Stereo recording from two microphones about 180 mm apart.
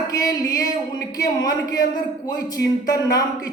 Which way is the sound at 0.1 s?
20° left (ahead or behind).